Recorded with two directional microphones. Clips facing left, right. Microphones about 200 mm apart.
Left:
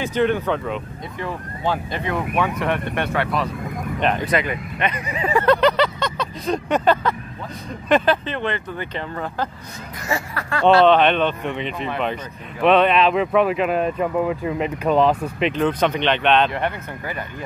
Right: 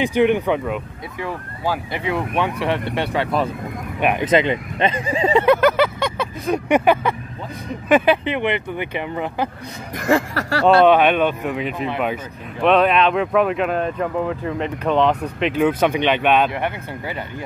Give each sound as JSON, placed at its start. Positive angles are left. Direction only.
{"t": 0.0, "sound": "speech", "side_deg": -15}
{"t": 4.3, "sound": "speech", "side_deg": -25}
{"t": 5.4, "sound": "vehicle", "side_deg": -5}
{"t": 7.9, "sound": "speech", "side_deg": -10}
{"t": 10.0, "sound": "speech", "side_deg": -65}
{"t": 10.9, "sound": "speech", "side_deg": -10}
{"t": 15.5, "sound": "speech", "side_deg": -10}